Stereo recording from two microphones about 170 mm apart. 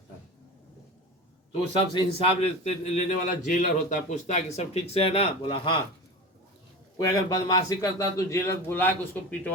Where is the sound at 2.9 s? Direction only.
50° left (ahead or behind); by 5.8 s 30° left (ahead or behind).